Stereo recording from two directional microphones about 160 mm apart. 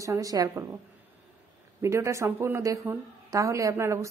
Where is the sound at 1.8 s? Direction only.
15° right (ahead or behind).